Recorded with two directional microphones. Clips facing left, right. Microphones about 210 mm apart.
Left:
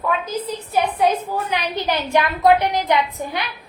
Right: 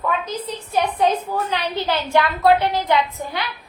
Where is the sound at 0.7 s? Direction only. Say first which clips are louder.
Even; 10° left (ahead or behind).